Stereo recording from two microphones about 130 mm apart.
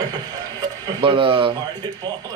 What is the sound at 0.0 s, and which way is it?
Speech, 30° right (ahead or behind).